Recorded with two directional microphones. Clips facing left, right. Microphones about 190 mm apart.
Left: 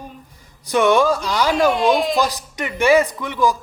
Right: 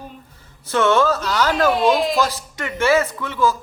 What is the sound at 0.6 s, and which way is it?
Speech, 15° left (ahead or behind).